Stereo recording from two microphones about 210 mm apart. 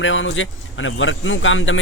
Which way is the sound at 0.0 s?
65° left (ahead or behind).